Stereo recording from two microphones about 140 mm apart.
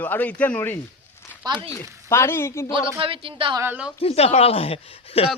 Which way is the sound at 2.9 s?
40° right (ahead or behind).